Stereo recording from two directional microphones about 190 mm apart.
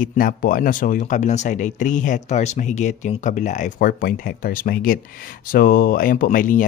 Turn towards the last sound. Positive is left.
turn(degrees=45)  # may be behind; listen again after turning